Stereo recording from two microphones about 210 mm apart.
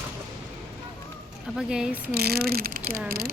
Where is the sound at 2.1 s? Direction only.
50° right (ahead or behind).